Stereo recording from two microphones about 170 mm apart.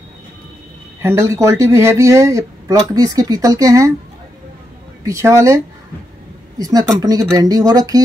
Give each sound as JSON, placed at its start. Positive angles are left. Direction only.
{"t": 1.0, "sound": "speech", "side_deg": -20}
{"t": 5.0, "sound": "speech", "side_deg": -15}
{"t": 6.6, "sound": "speech", "side_deg": -20}